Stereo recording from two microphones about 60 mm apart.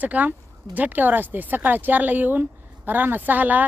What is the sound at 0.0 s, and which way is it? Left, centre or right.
Speech, right.